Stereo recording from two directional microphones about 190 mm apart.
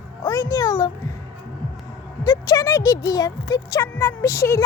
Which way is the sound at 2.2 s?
20° left (ahead or behind).